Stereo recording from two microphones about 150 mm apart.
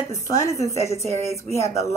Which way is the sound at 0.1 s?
20° left (ahead or behind).